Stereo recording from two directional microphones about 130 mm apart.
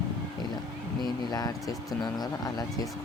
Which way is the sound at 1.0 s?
30° left (ahead or behind).